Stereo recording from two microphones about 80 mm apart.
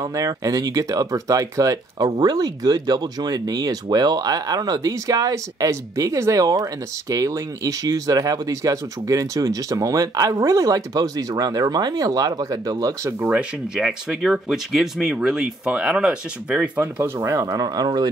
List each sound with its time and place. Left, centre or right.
0.0 s speech: right
13.4 s speech: centre
16.8 s speech: right